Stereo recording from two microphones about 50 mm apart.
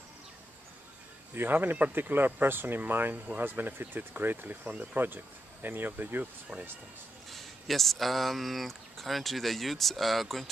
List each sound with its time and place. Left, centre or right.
1.3 s speech: right
7.2 s speech: centre